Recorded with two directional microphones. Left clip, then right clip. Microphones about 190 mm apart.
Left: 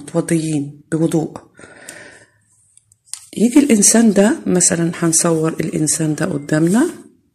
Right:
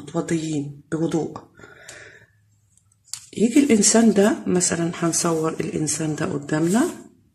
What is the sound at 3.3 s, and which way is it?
Speech, 35° left (ahead or behind).